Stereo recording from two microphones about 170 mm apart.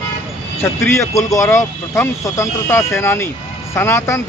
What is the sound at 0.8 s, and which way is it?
Speech, 15° left (ahead or behind).